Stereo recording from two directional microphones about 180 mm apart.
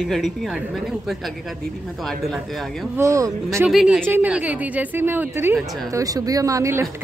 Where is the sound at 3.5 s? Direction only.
5° right (ahead or behind).